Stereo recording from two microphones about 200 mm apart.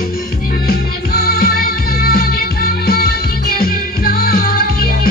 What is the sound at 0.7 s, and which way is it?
Music, 50° left (ahead or behind).